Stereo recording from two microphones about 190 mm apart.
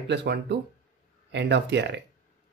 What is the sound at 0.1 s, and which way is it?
Speech, 65° right (ahead or behind).